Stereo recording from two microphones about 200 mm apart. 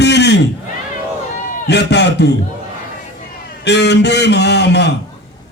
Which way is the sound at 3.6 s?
60° left (ahead or behind).